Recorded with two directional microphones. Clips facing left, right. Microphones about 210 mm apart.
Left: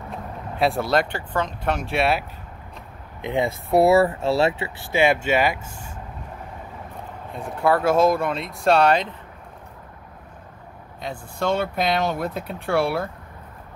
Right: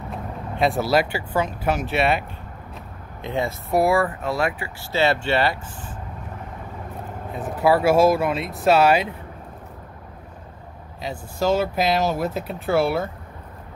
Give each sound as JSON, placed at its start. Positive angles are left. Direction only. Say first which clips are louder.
{"t": 0.1, "sound": "speech", "louder": "right 2 dB", "side_deg": 0}
{"t": 3.2, "sound": "speech", "louder": "left 2 dB", "side_deg": 15}
{"t": 4.9, "sound": "speech", "louder": "left 1 dB", "side_deg": 10}
{"t": 7.3, "sound": "speech", "louder": "right 2 dB", "side_deg": -5}
{"t": 11.0, "sound": "speech", "louder": "right 2 dB", "side_deg": -5}